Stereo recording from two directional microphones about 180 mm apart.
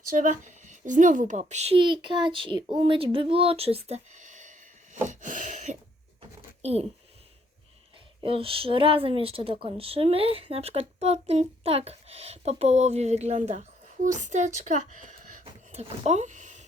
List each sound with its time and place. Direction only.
0.1 s speech: 45° right (ahead or behind)
4.9 s a sound: 45° right (ahead or behind)
6.6 s speech: 35° right (ahead or behind)
8.2 s speech: 30° right (ahead or behind)